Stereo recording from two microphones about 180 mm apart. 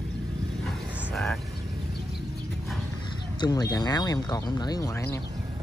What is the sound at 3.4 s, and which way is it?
Speech, 20° left (ahead or behind).